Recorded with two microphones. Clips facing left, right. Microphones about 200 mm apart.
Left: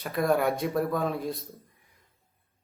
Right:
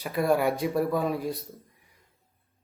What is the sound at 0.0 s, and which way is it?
Speech, 5° right (ahead or behind).